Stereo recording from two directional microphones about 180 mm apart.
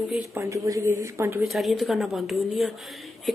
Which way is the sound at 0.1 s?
15° right (ahead or behind).